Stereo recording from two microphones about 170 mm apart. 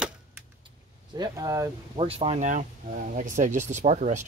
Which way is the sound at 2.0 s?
35° right (ahead or behind).